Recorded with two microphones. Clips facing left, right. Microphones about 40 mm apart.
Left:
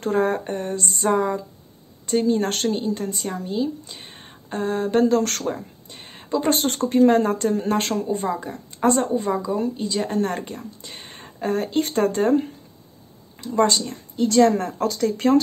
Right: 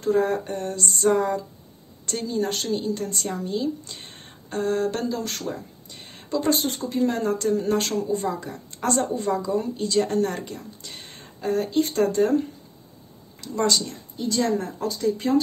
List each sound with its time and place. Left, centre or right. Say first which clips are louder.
0.0 s speech: left 1 dB; left
1.1 s a woman's voice: left 1 dB; centre
2.4 s speech: left 4 dB; left
2.7 s speech: left 1 dB; left
3.2 s speech: left 2 dB; centre
5.0 s speech: left 9 dB; left
5.9 s a sound: left 4 dB; left
6.5 s a woman's voice: left 4 dB; left; by 10.2 s centre
10.2 s speech: left 1 dB; left
13.4 s speech: left 4 dB; left
14.1 s a woman's voice: left 7 dB; left
14.8 s speech: left 3 dB; left